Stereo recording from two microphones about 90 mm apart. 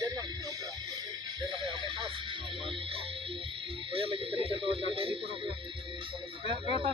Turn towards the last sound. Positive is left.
turn(degrees=-70)  # may be behind; listen again after turning